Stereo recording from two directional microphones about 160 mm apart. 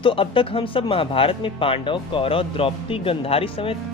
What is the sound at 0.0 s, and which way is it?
Speech, 35° left (ahead or behind).